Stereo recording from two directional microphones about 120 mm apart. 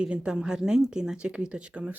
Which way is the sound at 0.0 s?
10° right (ahead or behind).